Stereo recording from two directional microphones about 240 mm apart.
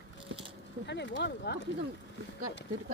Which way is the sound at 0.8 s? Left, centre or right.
Left.